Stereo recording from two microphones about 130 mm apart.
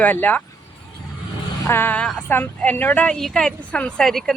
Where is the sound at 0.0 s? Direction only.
15° left (ahead or behind).